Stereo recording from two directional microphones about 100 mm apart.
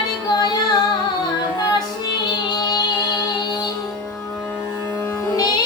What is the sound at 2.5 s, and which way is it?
Music, 45° left (ahead or behind).